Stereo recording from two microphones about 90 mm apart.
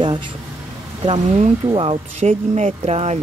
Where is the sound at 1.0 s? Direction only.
70° right (ahead or behind); by 2.0 s 90° right.